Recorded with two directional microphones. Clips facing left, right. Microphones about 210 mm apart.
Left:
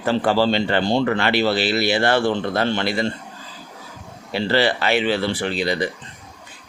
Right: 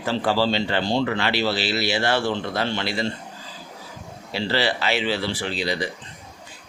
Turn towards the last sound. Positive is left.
turn(degrees=55)  # may be behind; listen again after turning